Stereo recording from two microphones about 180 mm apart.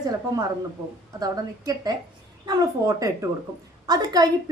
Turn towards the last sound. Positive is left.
turn(degrees=-20)  # may be behind; listen again after turning